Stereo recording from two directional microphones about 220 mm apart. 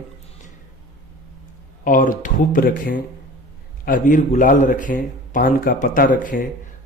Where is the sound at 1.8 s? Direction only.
40° left (ahead or behind).